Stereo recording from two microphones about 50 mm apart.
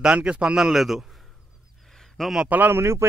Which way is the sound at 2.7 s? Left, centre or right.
Right.